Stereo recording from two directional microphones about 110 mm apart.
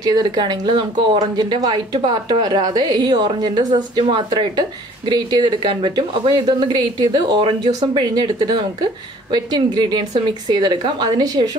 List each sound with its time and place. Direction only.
0.0 s a woman's voice: 35° right (ahead or behind)